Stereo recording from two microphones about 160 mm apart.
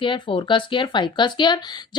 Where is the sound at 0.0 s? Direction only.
30° left (ahead or behind).